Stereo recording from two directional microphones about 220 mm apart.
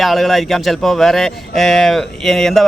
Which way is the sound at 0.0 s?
Centre (ahead or behind).